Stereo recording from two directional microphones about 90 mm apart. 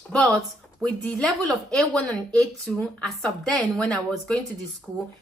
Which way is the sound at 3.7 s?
5° left (ahead or behind).